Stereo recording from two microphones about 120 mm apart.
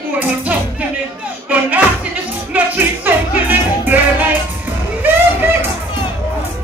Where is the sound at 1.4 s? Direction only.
10° right (ahead or behind).